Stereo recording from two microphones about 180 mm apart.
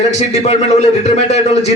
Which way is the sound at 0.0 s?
40° left (ahead or behind).